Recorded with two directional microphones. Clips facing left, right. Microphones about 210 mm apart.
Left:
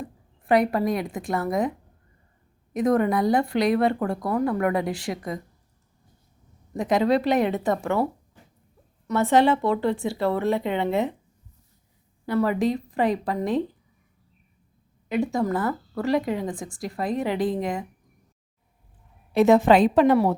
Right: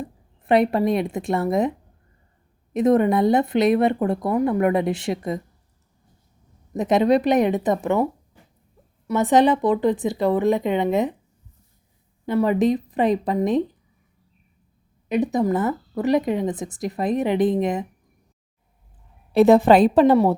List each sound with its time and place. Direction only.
0.0 s a woman's voice: 25° right (ahead or behind)
2.7 s speech: 25° right (ahead or behind)
6.7 s speech: 20° right (ahead or behind)
9.0 s speech: 15° right (ahead or behind)
12.2 s speech: 20° right (ahead or behind)
15.1 s speech: 20° right (ahead or behind)
19.3 s a woman's voice: 35° right (ahead or behind)